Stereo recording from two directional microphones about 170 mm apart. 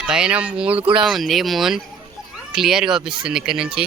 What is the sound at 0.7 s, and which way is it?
Speech, 30° right (ahead or behind).